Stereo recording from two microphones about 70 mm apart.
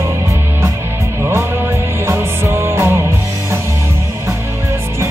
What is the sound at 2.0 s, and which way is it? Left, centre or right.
Music, right.